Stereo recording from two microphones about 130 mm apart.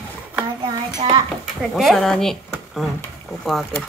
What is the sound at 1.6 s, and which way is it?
Speech, centre (ahead or behind).